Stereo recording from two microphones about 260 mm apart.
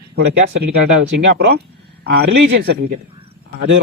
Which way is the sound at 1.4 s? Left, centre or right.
Right.